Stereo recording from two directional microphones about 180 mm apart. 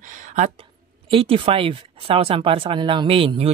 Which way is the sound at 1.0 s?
30° right (ahead or behind).